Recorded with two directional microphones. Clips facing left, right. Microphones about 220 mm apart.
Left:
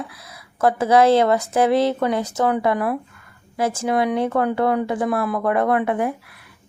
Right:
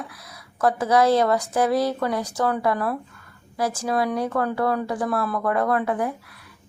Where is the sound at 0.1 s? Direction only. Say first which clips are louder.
Left 1 dB; 25° left (ahead or behind).